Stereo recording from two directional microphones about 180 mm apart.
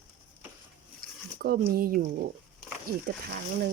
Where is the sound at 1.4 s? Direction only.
55° right (ahead or behind).